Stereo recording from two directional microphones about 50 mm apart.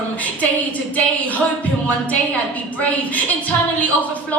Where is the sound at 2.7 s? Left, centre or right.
Left.